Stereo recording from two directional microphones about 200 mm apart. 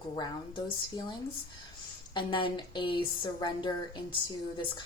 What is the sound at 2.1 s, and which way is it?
Speech, 25° left (ahead or behind).